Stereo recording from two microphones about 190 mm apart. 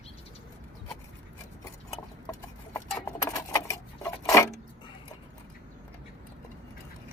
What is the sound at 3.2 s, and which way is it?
Keys jangling, 15° left (ahead or behind).